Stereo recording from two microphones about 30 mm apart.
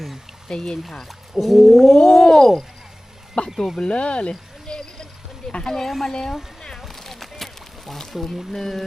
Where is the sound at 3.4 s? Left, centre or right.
Left.